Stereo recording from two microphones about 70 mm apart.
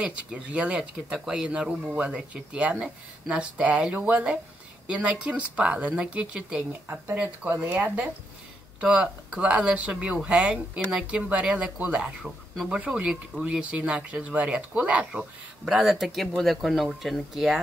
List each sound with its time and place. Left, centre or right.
0.0 s speech: centre